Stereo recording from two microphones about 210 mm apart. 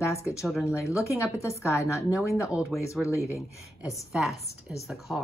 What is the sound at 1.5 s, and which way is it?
Speech, 15° left (ahead or behind).